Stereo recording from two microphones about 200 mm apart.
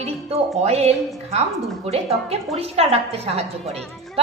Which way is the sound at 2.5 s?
30° right (ahead or behind).